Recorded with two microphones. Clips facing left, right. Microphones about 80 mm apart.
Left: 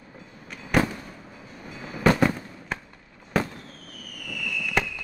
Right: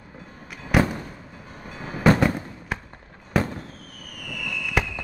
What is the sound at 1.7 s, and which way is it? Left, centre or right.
Train, right.